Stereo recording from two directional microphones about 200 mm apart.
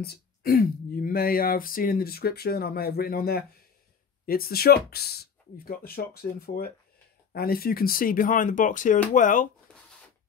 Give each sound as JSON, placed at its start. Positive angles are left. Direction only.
{"t": 0.0, "sound": "speech", "side_deg": 50}